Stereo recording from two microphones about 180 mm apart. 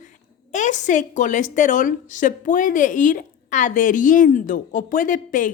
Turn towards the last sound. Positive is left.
turn(degrees=45)  # may be behind; listen again after turning